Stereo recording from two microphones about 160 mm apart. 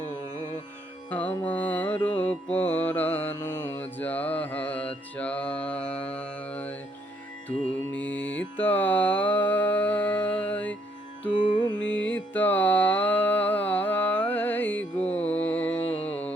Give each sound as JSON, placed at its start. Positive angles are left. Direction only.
{"t": 1.1, "sound": "mantra", "side_deg": 10}
{"t": 7.9, "sound": "music", "side_deg": 10}
{"t": 11.4, "sound": "carnatic music", "side_deg": 30}
{"t": 11.8, "sound": "music", "side_deg": 10}